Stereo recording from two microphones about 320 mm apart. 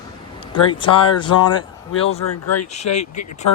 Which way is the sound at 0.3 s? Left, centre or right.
Centre.